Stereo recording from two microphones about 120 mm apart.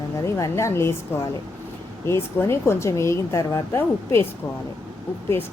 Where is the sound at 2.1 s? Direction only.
20° left (ahead or behind).